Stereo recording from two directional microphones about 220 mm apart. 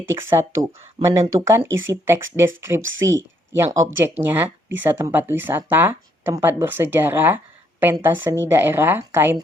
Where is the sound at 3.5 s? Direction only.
10° right (ahead or behind).